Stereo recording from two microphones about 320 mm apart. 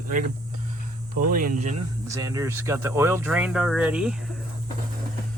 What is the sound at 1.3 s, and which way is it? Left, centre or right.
Speech, right.